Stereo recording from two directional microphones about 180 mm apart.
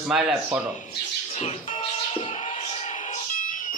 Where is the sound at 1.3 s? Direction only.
35° left (ahead or behind).